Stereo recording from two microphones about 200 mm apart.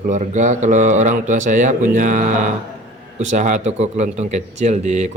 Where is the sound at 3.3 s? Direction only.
35° right (ahead or behind).